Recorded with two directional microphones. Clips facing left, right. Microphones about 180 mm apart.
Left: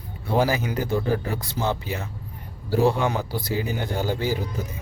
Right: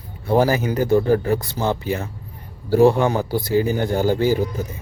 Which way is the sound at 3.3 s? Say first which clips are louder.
Right 8 dB; 50° right (ahead or behind).